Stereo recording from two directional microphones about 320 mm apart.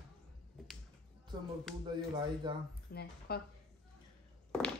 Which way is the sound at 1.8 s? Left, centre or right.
Centre.